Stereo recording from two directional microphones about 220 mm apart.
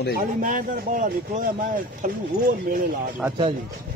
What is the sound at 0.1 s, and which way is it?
Speech, 35° right (ahead or behind).